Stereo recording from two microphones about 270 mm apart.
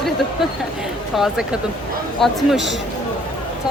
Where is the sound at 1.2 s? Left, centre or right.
Centre.